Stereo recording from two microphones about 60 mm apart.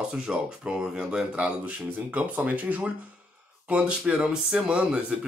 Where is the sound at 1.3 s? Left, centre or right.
Right.